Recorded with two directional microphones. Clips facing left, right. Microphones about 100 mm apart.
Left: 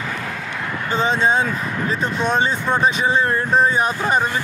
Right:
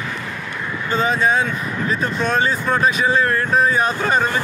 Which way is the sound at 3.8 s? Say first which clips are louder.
Right 1 dB; 15° left (ahead or behind).